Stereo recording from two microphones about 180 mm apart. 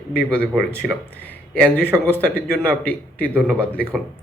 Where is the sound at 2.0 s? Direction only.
10° left (ahead or behind).